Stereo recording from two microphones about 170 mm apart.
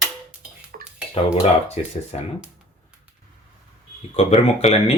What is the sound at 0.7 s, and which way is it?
Dishes, 60° right (ahead or behind).